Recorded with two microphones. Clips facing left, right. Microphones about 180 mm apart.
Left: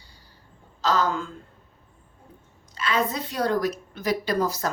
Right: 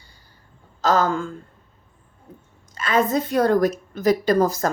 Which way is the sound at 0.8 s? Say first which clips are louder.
Right 4 dB; 50° right (ahead or behind).